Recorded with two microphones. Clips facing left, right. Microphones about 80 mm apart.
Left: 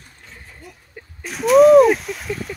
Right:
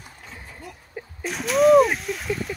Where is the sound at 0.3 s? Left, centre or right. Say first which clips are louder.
Right 1 dB; centre.